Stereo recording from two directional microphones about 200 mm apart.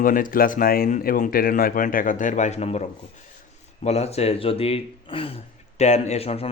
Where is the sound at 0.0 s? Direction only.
45° left (ahead or behind).